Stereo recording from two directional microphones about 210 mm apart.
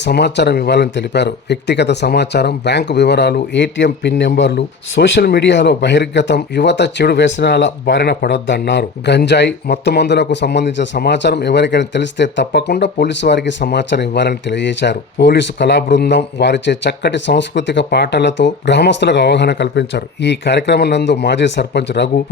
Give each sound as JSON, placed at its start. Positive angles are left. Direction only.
{"t": 0.0, "sound": "speech", "side_deg": 55}